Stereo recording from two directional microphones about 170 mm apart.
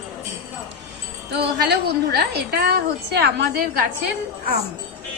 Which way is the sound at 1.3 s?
75° right (ahead or behind).